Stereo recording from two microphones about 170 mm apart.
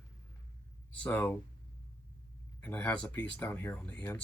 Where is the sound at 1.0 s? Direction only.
10° left (ahead or behind).